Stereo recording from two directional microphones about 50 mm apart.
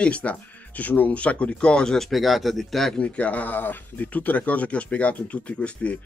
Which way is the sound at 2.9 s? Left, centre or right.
Left.